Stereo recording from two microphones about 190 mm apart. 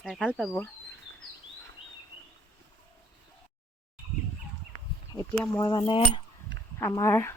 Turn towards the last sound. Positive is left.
turn(degrees=15)  # may be behind; listen again after turning